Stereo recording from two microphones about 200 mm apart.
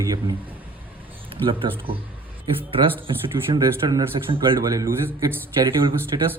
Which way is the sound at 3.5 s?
20° right (ahead or behind).